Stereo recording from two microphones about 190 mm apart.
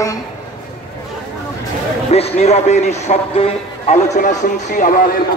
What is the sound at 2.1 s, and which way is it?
A man's voice, 35° left (ahead or behind).